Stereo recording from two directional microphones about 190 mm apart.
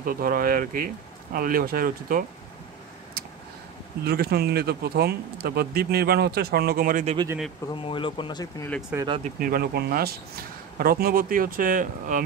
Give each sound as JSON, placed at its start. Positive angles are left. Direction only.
{"t": 0.0, "sound": "speech", "side_deg": -50}
{"t": 4.0, "sound": "speech", "side_deg": -55}
{"t": 7.7, "sound": "speech", "side_deg": 25}
{"t": 8.9, "sound": "speech", "side_deg": -25}
{"t": 9.4, "sound": "speech", "side_deg": -55}